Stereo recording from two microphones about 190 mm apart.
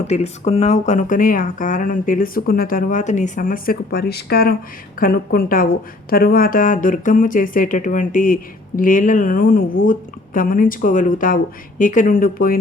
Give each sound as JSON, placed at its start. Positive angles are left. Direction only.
{"t": 0.1, "sound": "speech", "side_deg": 35}